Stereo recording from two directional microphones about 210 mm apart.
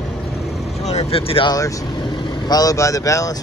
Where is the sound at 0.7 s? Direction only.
30° left (ahead or behind).